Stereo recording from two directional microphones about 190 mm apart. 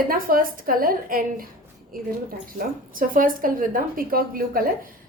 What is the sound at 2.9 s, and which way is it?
A woman's voice, 45° right (ahead or behind).